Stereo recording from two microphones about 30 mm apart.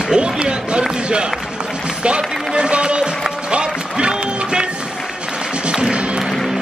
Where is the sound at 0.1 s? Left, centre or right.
Right.